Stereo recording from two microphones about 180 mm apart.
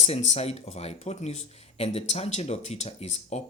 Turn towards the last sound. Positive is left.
turn(degrees=40)  # may be behind; listen again after turning